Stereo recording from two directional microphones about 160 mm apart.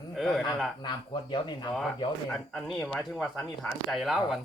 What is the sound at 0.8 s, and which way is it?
Speech, 30° left (ahead or behind).